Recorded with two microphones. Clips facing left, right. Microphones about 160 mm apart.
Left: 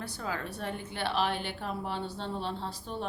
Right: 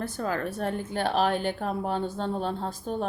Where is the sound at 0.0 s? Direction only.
50° right (ahead or behind).